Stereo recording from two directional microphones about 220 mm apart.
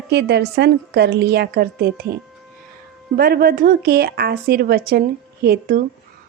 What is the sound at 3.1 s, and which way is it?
A woman's voice, 45° right (ahead or behind).